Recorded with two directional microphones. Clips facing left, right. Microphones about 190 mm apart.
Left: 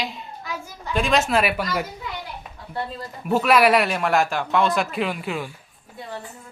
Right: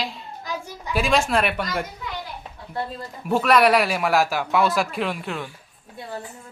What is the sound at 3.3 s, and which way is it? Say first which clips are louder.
Speech: even; 5° left (ahead or behind).